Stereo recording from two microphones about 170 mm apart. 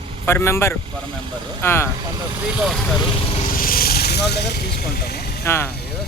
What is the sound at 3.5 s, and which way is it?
Speech, 60° left (ahead or behind).